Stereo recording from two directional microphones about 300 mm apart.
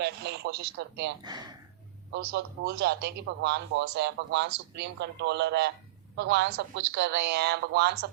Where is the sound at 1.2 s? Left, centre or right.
Centre.